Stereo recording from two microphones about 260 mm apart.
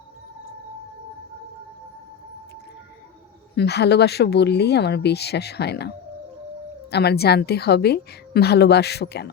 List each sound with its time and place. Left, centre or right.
3.5 s a woman's voice: left
6.9 s a woman's voice: left